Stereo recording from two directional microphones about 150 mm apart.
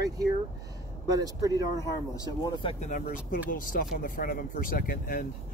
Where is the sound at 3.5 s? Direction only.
70° left (ahead or behind).